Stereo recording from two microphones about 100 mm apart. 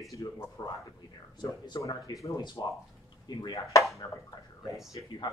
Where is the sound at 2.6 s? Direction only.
45° left (ahead or behind).